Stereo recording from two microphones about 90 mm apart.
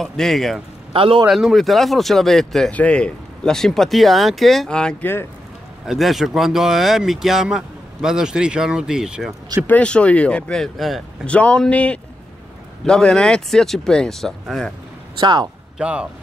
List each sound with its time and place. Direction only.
0.0 s speech: centre (ahead or behind)
0.9 s a man's voice: 90° right
1.2 s speech: 5° right (ahead or behind)
2.7 s speech: 15° left (ahead or behind)
5.9 s speech: centre (ahead or behind)
9.7 s speech: 15° left (ahead or behind)
11.2 s speech: 15° left (ahead or behind)
15.1 s speech: 55° right (ahead or behind)
15.8 s speech: 10° right (ahead or behind)